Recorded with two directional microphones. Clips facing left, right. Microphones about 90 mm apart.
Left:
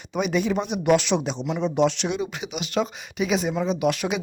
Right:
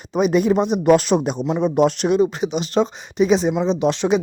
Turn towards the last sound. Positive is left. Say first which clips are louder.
# right 6 dB
turn(degrees=-30)  # may be behind; listen again after turning